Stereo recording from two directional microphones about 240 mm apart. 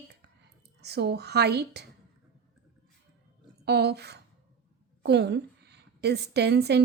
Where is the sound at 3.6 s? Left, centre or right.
Right.